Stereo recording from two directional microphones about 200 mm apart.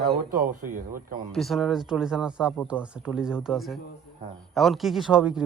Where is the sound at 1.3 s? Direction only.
Centre (ahead or behind).